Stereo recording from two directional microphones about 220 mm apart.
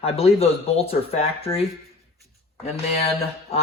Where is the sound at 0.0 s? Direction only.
25° left (ahead or behind).